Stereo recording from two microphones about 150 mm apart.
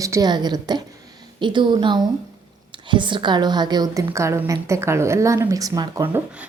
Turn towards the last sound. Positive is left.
turn(degrees=-15)  # may be behind; listen again after turning